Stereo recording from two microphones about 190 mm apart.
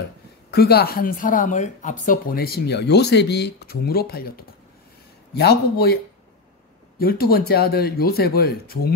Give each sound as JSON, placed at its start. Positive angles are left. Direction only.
{"t": 0.5, "sound": "speech", "side_deg": 55}
{"t": 7.0, "sound": "speech", "side_deg": 50}